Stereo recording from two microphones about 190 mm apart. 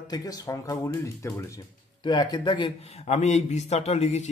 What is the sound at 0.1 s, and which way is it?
Speech, 20° left (ahead or behind).